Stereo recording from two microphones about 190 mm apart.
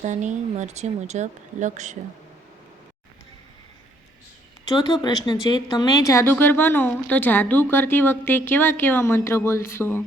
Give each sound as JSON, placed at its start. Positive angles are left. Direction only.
{"t": 0.0, "sound": "speech", "side_deg": -40}
{"t": 4.6, "sound": "speech", "side_deg": 20}